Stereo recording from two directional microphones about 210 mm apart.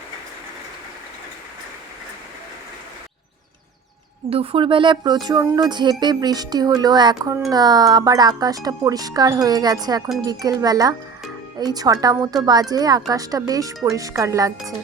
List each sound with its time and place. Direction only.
4.3 s speech: 25° right (ahead or behind)